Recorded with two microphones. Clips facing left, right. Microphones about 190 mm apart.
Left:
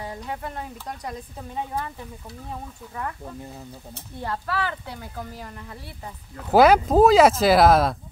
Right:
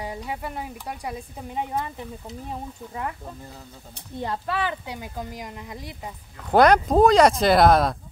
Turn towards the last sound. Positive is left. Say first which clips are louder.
# left 1 dB
turn(degrees=0)  # may be behind; listen again after turning